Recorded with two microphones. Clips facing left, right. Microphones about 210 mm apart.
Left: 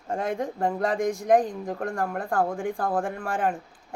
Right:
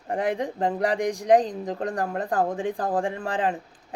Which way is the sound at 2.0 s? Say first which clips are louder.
Even; 30° right (ahead or behind).